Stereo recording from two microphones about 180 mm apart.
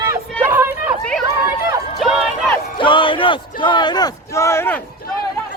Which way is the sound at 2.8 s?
30° left (ahead or behind).